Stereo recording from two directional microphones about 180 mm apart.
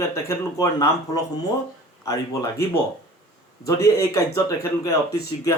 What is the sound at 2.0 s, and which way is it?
Speech, 20° left (ahead or behind).